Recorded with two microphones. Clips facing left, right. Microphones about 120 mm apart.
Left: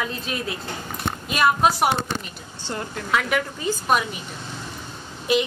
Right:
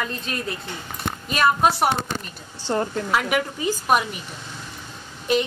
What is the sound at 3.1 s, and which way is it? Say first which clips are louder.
A woman's voice: even; 5° right (ahead or behind).